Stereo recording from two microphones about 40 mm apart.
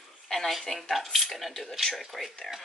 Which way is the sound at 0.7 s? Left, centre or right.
Centre.